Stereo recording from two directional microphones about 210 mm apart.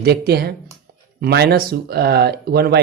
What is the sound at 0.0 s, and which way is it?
Speech, 50° right (ahead or behind).